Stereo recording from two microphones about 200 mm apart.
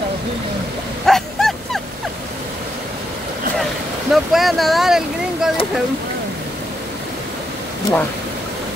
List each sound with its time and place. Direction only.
1.0 s dog: centre (ahead or behind)
4.1 s boat: centre (ahead or behind)